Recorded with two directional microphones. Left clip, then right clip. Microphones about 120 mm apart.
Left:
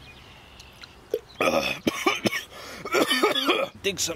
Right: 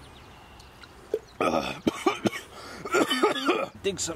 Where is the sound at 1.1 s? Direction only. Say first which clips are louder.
Left 2 dB; 5° left (ahead or behind).